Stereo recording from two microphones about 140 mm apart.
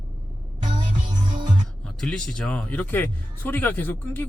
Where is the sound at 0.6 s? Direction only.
30° right (ahead or behind).